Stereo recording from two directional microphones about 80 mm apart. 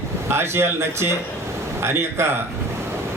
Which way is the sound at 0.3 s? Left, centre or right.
Right.